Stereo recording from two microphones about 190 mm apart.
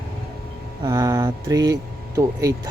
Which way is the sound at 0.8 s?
20° right (ahead or behind).